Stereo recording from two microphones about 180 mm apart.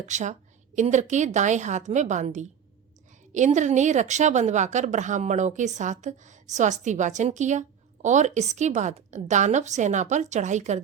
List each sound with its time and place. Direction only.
0.1 s a woman's voice: 40° right (ahead or behind)